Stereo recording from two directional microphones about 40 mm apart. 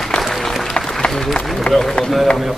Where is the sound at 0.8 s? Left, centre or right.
Centre.